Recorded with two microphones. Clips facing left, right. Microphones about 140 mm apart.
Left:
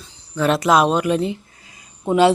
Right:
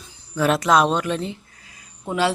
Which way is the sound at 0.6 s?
5° left (ahead or behind).